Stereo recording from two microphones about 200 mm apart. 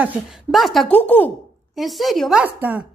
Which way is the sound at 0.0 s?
5° right (ahead or behind).